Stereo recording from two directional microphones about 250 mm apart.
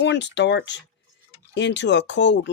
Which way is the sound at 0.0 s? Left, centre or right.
Left.